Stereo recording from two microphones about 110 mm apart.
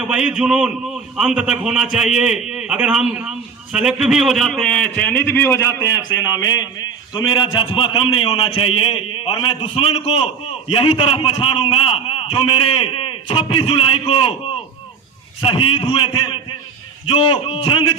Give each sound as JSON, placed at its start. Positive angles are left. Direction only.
{"t": 0.1, "sound": "a man's voice", "side_deg": -5}
{"t": 15.4, "sound": "a man's voice", "side_deg": 50}